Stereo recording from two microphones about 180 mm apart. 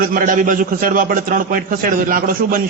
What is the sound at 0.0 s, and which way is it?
A man's voice, 50° right (ahead or behind).